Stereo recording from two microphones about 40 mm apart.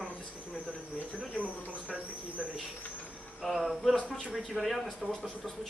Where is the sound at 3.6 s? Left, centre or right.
Centre.